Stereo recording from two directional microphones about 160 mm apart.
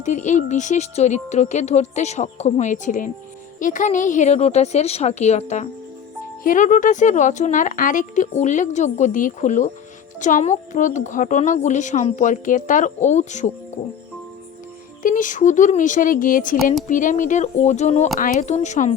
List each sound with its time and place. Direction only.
0.0 s speech: 50° left (ahead or behind)
15.0 s speech: 55° left (ahead or behind)